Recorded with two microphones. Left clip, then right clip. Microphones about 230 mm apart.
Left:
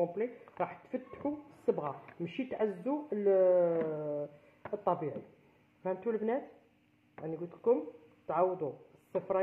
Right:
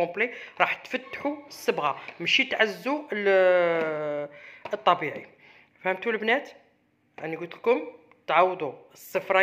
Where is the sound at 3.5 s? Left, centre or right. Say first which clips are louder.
Right 6 dB; right.